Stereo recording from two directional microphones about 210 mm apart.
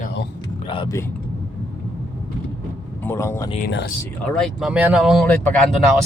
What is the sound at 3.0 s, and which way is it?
Speech, 10° left (ahead or behind).